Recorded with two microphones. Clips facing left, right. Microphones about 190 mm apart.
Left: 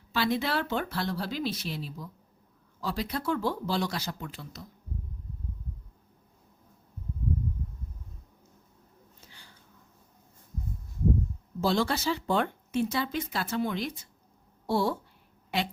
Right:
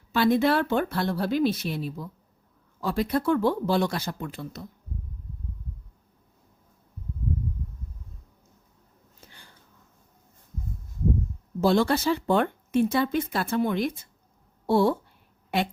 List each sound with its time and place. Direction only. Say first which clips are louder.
0.1 s speech: right 7 dB; 50° right (ahead or behind)
11.6 s speech: right 5 dB; 55° right (ahead or behind)
15.4 s a sound: right 4 dB; 50° right (ahead or behind)